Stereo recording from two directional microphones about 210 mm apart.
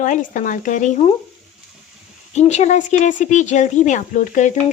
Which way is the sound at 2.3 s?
35° left (ahead or behind).